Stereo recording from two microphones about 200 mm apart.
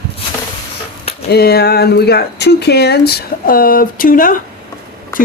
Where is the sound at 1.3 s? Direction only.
55° left (ahead or behind).